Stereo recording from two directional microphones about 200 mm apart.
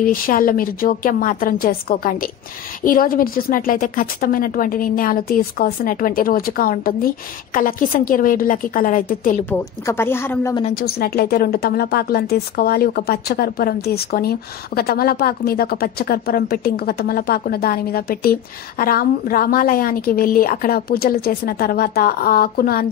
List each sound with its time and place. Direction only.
0.0 s a woman's voice: 45° left (ahead or behind)
9.5 s speech: 10° left (ahead or behind)
10.7 s a woman's voice: 45° left (ahead or behind)